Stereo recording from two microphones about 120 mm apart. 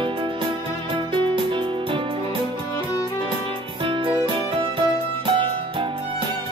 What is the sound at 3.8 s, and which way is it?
Music, 45° right (ahead or behind).